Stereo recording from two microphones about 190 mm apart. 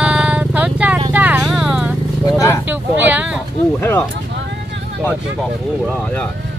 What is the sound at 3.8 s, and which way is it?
Speech, 10° left (ahead or behind).